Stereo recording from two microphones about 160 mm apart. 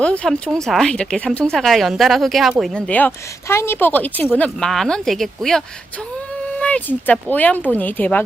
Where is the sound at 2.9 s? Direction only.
10° left (ahead or behind).